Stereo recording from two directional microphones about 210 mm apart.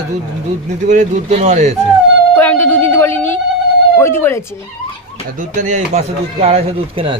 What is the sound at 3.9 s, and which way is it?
Speech, 10° left (ahead or behind).